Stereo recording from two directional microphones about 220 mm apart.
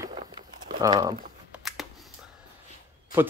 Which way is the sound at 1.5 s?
Centre (ahead or behind).